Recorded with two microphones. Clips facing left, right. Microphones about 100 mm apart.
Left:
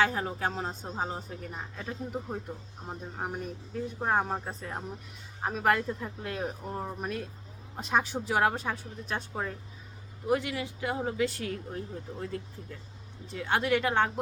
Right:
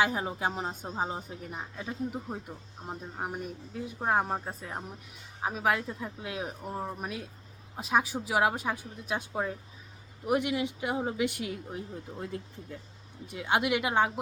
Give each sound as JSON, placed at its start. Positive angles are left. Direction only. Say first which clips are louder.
{"t": 0.0, "sound": "a woman's voice", "louder": "even", "side_deg": -15}
{"t": 13.2, "sound": "a woman's voice", "louder": "right 1 dB", "side_deg": -15}